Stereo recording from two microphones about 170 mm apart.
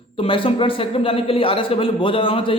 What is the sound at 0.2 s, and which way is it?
A man's voice, 30° left (ahead or behind).